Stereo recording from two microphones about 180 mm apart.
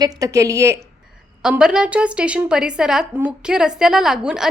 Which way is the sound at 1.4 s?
5° right (ahead or behind).